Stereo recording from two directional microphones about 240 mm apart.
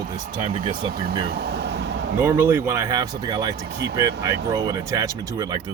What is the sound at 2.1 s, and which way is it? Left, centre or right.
Speech, centre.